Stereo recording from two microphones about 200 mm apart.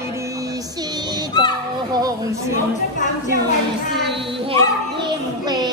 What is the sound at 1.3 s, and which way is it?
Children playing, 20° left (ahead or behind).